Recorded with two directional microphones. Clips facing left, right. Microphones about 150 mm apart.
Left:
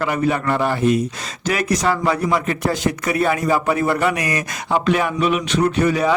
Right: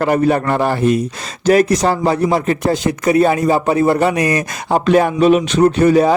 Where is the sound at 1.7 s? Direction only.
30° right (ahead or behind).